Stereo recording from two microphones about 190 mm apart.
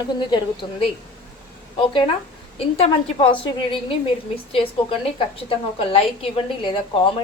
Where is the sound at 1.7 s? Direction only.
25° left (ahead or behind).